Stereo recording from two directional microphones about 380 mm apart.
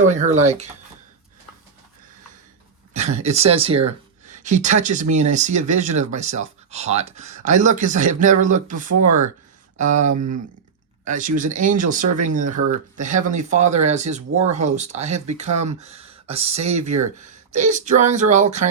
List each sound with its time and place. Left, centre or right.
0.0 s speech: centre
2.9 s speech: centre
11.0 s speech: centre